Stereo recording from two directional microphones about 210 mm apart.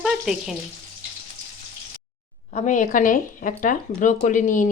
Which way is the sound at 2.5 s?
35° left (ahead or behind).